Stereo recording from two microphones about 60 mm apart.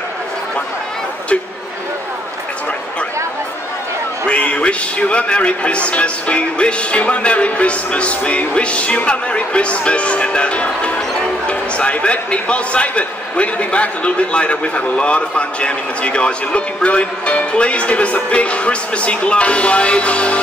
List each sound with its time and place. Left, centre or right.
4.3 s a man's voice: centre